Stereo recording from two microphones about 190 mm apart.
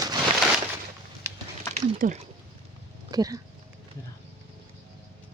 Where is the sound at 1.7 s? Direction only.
40° right (ahead or behind).